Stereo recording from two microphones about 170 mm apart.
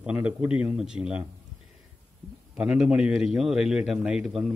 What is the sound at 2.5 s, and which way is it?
A man's voice, 5° right (ahead or behind).